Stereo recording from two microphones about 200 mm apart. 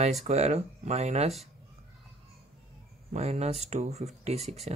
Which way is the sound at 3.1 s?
35° right (ahead or behind).